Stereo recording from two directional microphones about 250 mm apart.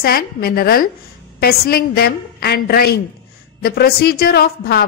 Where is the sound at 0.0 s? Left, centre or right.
Left.